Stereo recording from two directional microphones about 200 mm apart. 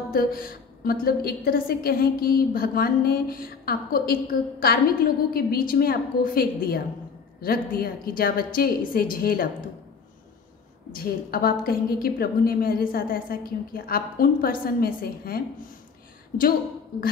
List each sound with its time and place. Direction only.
0.1 s a woman's voice: 45° left (ahead or behind)
11.0 s a woman's voice: 50° left (ahead or behind)